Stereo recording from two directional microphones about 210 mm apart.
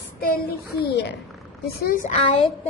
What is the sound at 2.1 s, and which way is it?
Speech, 30° left (ahead or behind).